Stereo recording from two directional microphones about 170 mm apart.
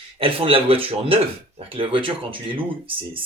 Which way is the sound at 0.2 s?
30° right (ahead or behind).